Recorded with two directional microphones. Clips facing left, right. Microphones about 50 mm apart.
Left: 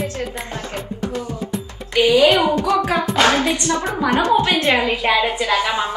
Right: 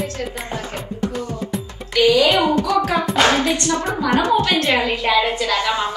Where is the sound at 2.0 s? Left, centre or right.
Left.